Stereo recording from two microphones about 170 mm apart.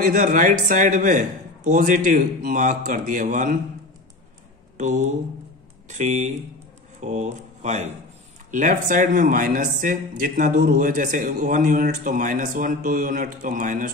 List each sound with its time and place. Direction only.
0.0 s speech: 55° right (ahead or behind)
4.7 s speech: 45° right (ahead or behind)